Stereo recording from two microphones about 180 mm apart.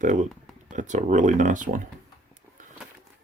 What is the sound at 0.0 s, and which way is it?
Speech, 45° right (ahead or behind).